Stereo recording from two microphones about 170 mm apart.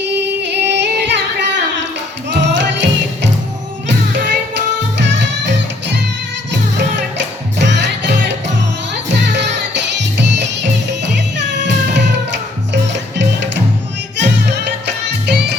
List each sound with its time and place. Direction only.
0.0 s singing: 90° right
2.3 s music: 90° right